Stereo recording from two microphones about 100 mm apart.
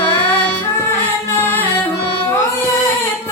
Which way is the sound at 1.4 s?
20° left (ahead or behind).